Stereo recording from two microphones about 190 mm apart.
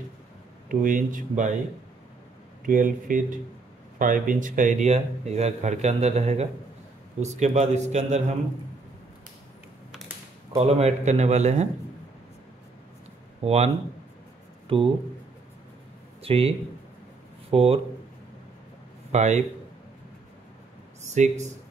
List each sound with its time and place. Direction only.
0.7 s speech: 45° right (ahead or behind)
2.6 s speech: 45° right (ahead or behind)
10.5 s speech: 35° right (ahead or behind)
13.4 s speech: 30° right (ahead or behind)
14.7 s speech: 30° right (ahead or behind)
16.2 s speech: 30° right (ahead or behind)
19.1 s speech: 35° right (ahead or behind)
21.1 s speech: 40° right (ahead or behind)